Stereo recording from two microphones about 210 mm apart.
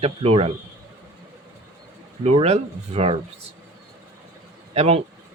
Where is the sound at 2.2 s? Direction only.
30° right (ahead or behind).